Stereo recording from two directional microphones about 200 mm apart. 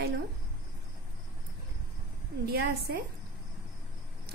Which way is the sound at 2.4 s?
50° right (ahead or behind).